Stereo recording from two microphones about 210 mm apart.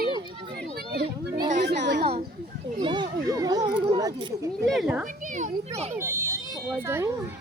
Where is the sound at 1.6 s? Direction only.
55° right (ahead or behind).